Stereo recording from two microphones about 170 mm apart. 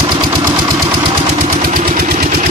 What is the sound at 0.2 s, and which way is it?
Engine, 25° right (ahead or behind).